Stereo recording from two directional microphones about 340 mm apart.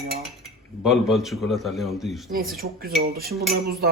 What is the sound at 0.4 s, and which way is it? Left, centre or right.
Speech, centre.